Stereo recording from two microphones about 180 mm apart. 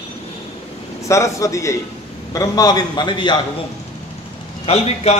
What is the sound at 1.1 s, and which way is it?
A man's voice, 15° left (ahead or behind).